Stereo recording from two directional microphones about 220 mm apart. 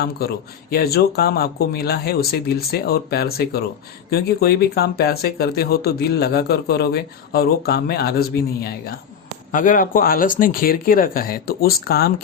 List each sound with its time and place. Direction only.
0.0 s speech: 45° left (ahead or behind)